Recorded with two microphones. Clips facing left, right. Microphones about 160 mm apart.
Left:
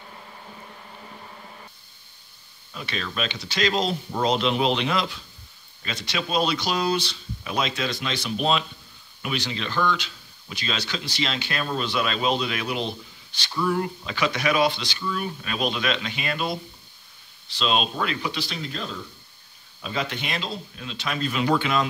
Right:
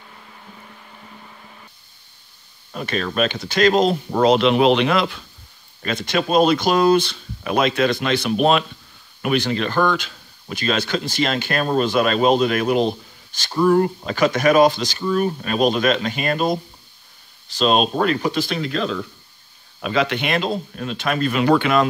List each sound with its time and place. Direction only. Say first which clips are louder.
2.7 s speech: right 8 dB; 50° right (ahead or behind)
18.6 s speech: right 10 dB; 80° right; by 21.8 s 60° right (ahead or behind)